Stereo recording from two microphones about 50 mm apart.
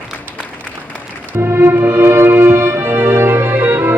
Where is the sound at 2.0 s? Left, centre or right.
Right.